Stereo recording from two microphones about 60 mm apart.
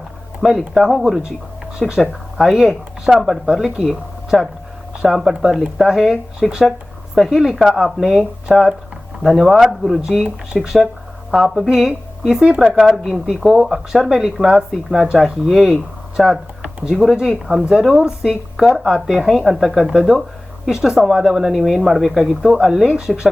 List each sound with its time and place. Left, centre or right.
0.7 s speech: centre
9.2 s speech: centre